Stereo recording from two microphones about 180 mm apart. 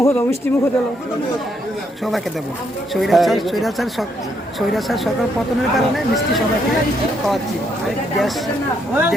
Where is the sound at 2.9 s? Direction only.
Centre (ahead or behind).